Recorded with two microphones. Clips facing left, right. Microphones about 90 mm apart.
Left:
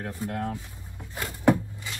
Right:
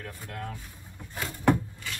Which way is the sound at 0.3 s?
50° left (ahead or behind).